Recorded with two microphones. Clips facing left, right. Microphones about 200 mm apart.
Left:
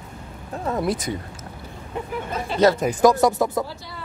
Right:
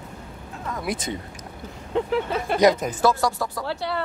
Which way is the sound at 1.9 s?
80° right.